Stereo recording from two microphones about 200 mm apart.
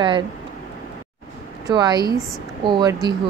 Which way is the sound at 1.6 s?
20° right (ahead or behind).